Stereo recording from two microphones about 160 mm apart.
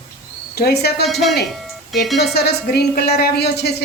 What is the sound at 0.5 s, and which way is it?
Speech, 90° left.